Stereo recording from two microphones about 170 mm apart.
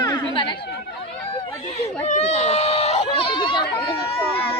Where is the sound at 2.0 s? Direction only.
40° left (ahead or behind).